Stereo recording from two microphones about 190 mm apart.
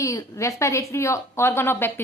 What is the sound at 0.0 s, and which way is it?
A woman's voice, 15° left (ahead or behind).